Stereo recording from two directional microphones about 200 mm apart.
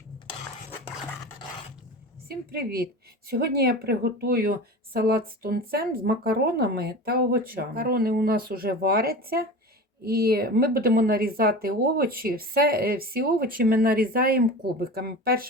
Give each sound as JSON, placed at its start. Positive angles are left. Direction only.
{"t": 2.2, "sound": "speech", "side_deg": -50}